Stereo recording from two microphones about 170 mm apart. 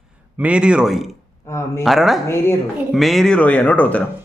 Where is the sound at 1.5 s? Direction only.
15° left (ahead or behind).